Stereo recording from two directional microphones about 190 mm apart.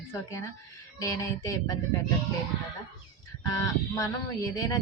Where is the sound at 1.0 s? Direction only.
15° left (ahead or behind).